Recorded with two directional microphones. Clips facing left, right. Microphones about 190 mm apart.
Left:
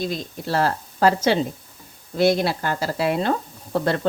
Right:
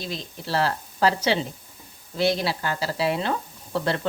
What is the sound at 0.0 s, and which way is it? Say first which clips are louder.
Speech: left 6 dB; 50° left (ahead or behind).